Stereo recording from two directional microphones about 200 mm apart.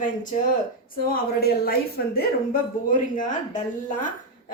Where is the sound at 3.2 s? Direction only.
40° left (ahead or behind).